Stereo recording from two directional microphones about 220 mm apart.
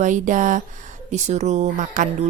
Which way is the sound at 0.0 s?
35° right (ahead or behind).